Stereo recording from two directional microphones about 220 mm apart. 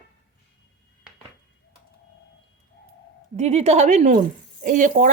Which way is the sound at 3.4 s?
30° right (ahead or behind).